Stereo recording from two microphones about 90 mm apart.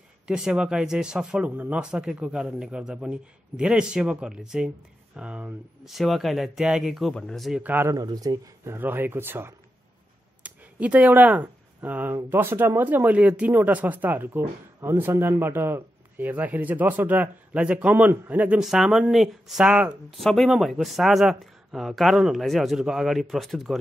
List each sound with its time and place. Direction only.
0.3 s a man's voice: 10° right (ahead or behind)
5.9 s speech: centre (ahead or behind)
7.5 s speech: 20° right (ahead or behind)
7.9 s speech: 45° right (ahead or behind)
8.6 s speech: 25° right (ahead or behind)
10.4 s a man's voice: 15° right (ahead or behind)
18.6 s speech: 5° right (ahead or behind)
20.2 s speech: centre (ahead or behind)